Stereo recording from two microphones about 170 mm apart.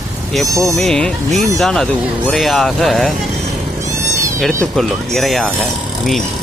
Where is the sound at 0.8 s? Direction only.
Centre (ahead or behind).